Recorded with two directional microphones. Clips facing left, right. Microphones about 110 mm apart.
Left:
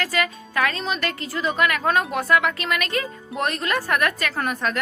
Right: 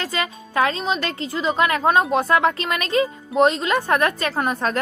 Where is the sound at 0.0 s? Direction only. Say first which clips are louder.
Left 1 dB; 25° right (ahead or behind).